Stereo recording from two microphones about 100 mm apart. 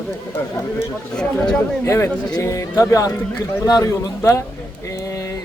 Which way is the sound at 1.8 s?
30° left (ahead or behind).